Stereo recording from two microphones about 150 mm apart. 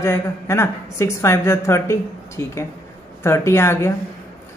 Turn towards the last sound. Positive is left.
turn(degrees=15)  # may be behind; listen again after turning